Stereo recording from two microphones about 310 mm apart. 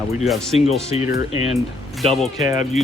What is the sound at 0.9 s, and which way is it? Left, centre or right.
Speech, left.